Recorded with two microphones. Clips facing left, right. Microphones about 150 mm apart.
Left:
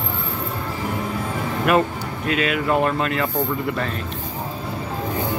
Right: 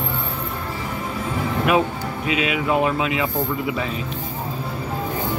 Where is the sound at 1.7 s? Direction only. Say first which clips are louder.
Left 2 dB; centre (ahead or behind).